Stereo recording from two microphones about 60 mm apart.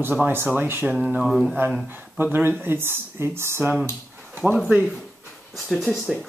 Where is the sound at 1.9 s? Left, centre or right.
Right.